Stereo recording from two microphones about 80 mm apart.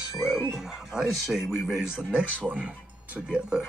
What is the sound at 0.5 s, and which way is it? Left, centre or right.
Music, centre.